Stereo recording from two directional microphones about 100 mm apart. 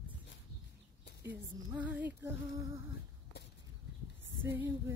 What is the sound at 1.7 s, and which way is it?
Music, 15° right (ahead or behind).